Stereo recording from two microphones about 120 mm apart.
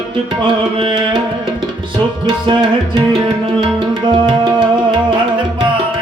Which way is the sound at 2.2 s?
35° right (ahead or behind).